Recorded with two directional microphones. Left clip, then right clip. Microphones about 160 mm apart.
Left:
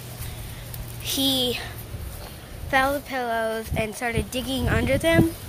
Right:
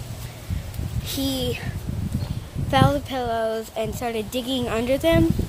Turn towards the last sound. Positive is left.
turn(degrees=-25)  # may be behind; listen again after turning